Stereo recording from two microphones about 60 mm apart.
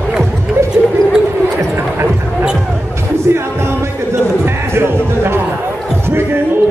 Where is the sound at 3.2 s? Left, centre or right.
Right.